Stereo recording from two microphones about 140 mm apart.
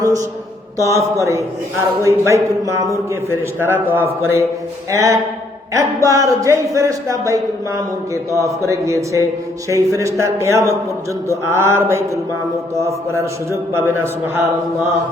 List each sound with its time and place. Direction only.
0.0 s a man's voice: 25° right (ahead or behind)